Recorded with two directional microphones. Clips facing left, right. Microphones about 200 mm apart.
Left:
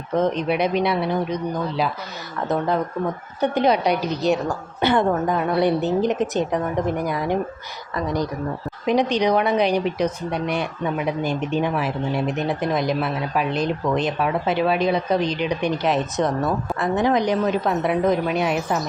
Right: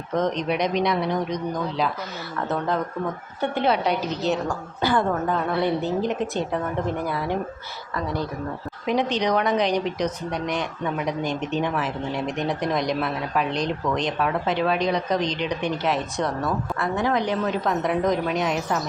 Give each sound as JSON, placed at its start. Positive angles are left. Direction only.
{"t": 0.1, "sound": "speech", "side_deg": 5}